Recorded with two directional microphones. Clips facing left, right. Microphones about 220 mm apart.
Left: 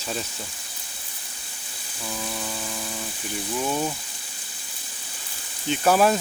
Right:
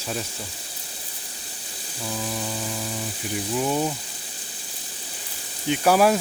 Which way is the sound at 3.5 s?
15° right (ahead or behind).